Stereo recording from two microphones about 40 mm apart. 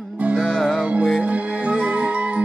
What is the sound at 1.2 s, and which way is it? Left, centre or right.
Music, right.